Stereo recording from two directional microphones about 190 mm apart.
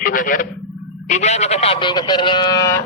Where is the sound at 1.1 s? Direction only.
35° left (ahead or behind); by 2.8 s 20° left (ahead or behind).